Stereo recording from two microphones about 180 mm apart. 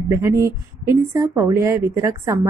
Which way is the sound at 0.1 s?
15° right (ahead or behind).